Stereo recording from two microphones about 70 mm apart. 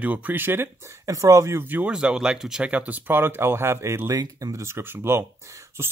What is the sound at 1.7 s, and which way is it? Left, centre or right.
Speech, centre.